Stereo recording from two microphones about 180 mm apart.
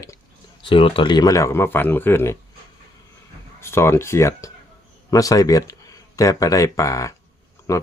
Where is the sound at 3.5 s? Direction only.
15° left (ahead or behind).